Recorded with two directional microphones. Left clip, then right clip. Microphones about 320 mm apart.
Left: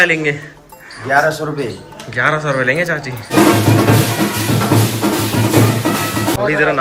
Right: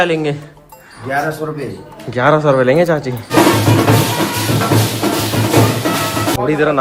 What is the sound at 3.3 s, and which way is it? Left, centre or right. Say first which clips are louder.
Music: even; centre.